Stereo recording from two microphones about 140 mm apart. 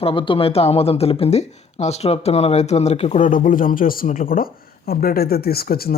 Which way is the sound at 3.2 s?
70° left (ahead or behind).